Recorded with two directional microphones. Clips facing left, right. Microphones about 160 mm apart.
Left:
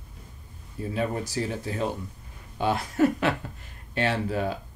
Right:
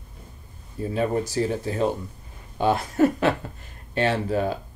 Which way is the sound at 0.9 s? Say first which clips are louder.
Right 4 dB; 35° right (ahead or behind).